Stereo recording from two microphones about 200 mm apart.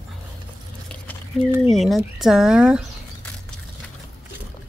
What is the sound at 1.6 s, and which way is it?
A woman's voice, centre (ahead or behind).